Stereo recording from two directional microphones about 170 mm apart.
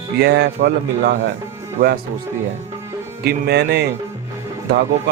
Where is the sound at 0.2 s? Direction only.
80° right.